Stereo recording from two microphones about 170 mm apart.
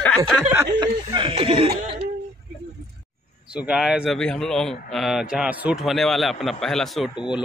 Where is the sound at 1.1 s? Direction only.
30° right (ahead or behind).